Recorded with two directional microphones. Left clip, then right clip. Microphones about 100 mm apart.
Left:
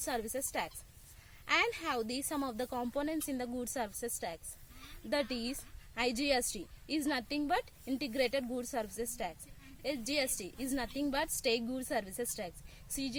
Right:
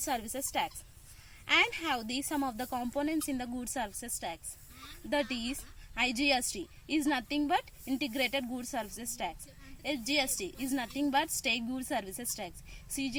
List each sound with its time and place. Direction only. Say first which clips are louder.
0.0 s speech: right 2 dB; 30° left (ahead or behind)